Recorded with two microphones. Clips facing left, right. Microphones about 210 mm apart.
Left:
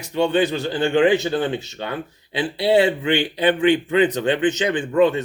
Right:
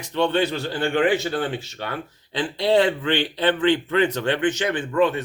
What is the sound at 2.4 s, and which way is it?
A man's voice, 10° left (ahead or behind).